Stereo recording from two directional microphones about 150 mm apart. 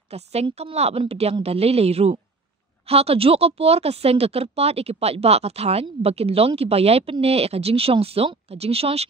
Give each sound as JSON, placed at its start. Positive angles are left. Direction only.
{"t": 0.1, "sound": "a woman's voice", "side_deg": -45}